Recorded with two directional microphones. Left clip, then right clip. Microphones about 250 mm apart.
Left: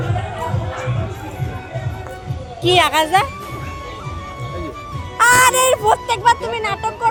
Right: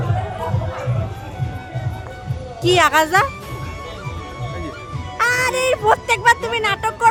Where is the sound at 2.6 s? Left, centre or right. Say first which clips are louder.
Even; centre.